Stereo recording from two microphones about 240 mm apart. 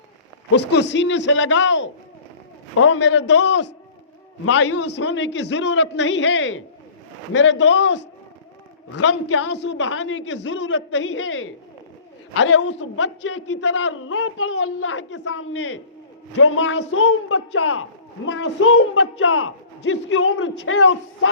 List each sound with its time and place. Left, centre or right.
0.5 s a man's voice: left
18.3 s a man's voice: left